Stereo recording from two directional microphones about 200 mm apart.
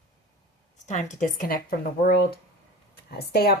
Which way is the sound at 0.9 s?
35° left (ahead or behind).